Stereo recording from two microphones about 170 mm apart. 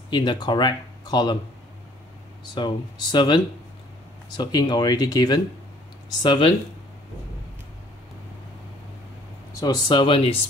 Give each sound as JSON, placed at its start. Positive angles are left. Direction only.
{"t": 0.1, "sound": "speech", "side_deg": 25}
{"t": 2.5, "sound": "speech", "side_deg": 25}
{"t": 9.5, "sound": "speech", "side_deg": 20}